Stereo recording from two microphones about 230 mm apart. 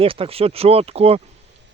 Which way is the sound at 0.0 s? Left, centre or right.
Right.